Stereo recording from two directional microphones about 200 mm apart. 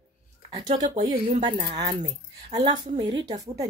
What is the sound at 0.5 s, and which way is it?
Speech, 35° right (ahead or behind).